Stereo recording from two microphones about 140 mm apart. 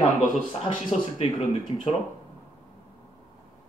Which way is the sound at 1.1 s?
50° left (ahead or behind).